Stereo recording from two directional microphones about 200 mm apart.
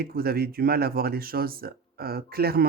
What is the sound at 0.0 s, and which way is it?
Speech, 50° right (ahead or behind).